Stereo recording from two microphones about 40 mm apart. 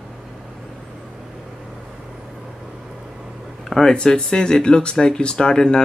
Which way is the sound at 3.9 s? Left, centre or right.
Left.